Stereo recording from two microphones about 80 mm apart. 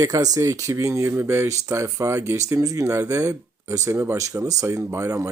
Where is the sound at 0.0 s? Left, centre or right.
Right.